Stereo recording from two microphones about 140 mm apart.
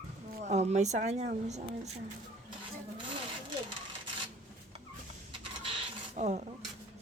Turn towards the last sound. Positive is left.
turn(degrees=-55)  # may be behind; listen again after turning